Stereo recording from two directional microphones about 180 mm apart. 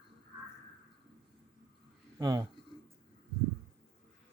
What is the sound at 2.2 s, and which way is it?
Speech, 20° right (ahead or behind).